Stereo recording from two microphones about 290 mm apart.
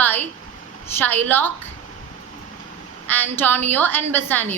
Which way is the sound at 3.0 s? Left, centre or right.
Centre.